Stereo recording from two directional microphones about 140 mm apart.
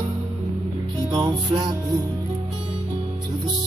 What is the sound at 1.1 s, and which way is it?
Music, 30° right (ahead or behind).